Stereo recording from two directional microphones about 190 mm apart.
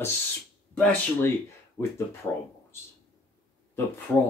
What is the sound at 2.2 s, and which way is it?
Speech, 20° left (ahead or behind).